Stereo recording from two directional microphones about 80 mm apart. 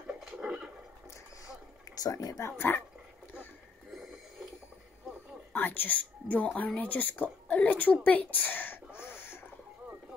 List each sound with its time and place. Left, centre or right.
0.0 s a sound: centre
2.0 s speech: left
2.7 s speech: left
5.5 s speech: left